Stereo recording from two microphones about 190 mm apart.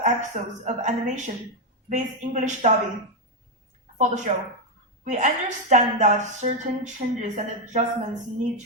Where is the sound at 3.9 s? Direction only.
40° right (ahead or behind).